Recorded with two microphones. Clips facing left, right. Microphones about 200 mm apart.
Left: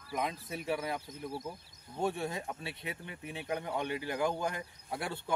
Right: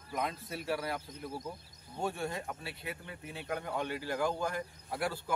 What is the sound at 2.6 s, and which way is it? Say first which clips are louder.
Speech: left 1 dB; 20° left (ahead or behind).